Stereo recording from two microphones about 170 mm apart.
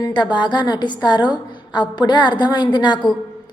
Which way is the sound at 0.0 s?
25° left (ahead or behind).